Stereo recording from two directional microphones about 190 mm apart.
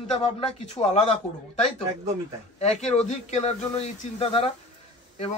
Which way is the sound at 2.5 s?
35° left (ahead or behind).